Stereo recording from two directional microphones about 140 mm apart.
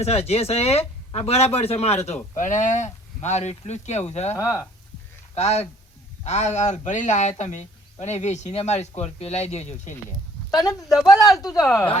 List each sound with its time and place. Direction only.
0.0 s speech: 50° left (ahead or behind)
4.4 s speech: 20° left (ahead or behind)
5.3 s speech: 50° left (ahead or behind)
10.5 s speech: centre (ahead or behind)
11.7 s speech: 20° left (ahead or behind)